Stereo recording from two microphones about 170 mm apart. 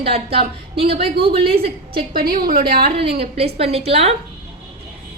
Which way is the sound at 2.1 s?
60° right (ahead or behind).